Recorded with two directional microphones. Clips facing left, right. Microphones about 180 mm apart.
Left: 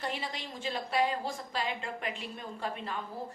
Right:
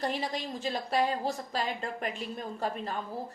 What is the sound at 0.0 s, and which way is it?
A woman's voice, 40° right (ahead or behind).